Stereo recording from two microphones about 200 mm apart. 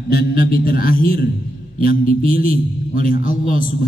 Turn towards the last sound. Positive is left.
turn(degrees=45)  # may be behind; listen again after turning